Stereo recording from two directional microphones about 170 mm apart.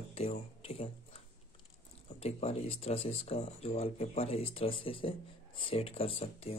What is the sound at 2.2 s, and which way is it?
Speech, 35° left (ahead or behind).